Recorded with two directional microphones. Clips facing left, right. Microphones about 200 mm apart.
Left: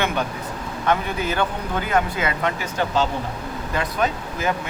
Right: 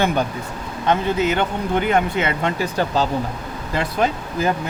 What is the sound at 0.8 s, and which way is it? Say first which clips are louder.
Speech: right 4 dB; 20° right (ahead or behind).